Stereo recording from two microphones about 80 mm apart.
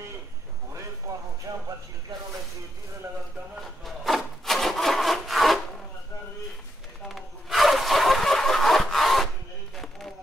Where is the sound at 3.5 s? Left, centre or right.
Centre.